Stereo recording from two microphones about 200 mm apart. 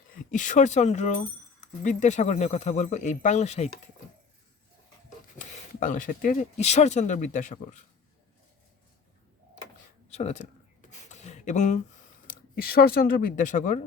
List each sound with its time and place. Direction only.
0.3 s speech: 40° left (ahead or behind)
5.4 s speech: 40° left (ahead or behind)
10.1 s a sound: 35° left (ahead or behind)
12.3 s speech: 50° left (ahead or behind)